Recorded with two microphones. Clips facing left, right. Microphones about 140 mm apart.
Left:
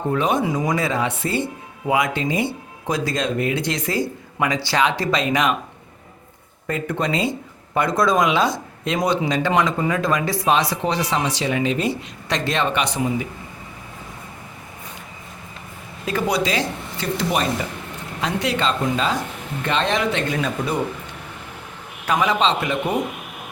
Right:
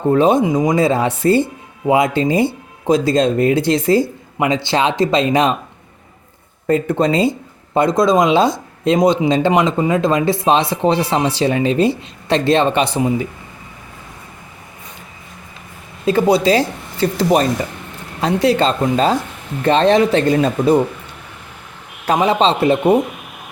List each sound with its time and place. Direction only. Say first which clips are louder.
0.1 s speech: right 8 dB; 30° right (ahead or behind)
0.4 s speech: right 7 dB; 20° right (ahead or behind)
0.9 s speech: right 8 dB; 35° right (ahead or behind)
6.7 s speech: right 8 dB; 35° right (ahead or behind)
16.0 s speech: right 8 dB; 30° right (ahead or behind)
22.0 s speech: right 5 dB; 35° right (ahead or behind)